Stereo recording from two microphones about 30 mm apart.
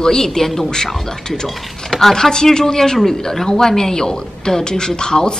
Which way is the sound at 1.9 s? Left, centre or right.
Centre.